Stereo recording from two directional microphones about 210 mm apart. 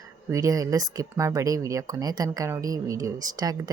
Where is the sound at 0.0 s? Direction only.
15° right (ahead or behind).